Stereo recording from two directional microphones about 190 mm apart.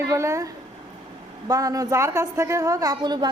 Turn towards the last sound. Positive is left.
turn(degrees=-25)  # may be behind; listen again after turning